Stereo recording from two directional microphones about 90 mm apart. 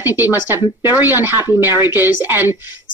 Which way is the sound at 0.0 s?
20° right (ahead or behind).